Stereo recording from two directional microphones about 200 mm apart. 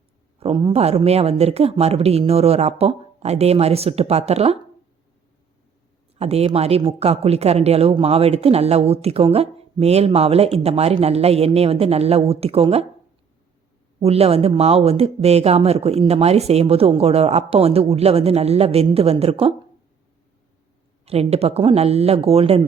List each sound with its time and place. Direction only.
0.3 s speech: 25° right (ahead or behind)
6.1 s speech: 30° right (ahead or behind)
14.0 s speech: 30° right (ahead or behind)
21.0 s speech: 30° right (ahead or behind)